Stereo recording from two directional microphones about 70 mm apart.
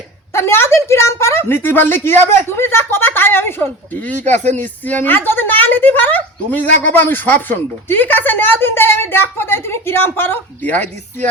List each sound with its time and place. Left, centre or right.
0.3 s a woman's voice: left